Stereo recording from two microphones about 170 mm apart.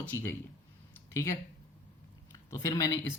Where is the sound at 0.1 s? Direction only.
15° left (ahead or behind).